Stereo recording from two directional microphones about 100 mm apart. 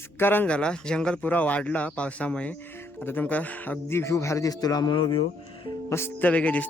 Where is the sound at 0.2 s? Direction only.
20° left (ahead or behind); by 5.2 s 50° left (ahead or behind).